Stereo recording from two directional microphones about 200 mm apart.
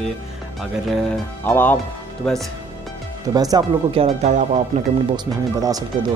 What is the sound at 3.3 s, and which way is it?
Speech, 20° right (ahead or behind).